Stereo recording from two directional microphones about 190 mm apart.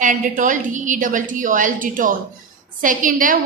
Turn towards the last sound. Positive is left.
turn(degrees=-45)  # may be behind; listen again after turning